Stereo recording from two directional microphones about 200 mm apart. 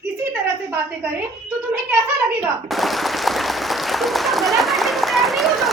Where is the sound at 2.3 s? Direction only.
Centre (ahead or behind).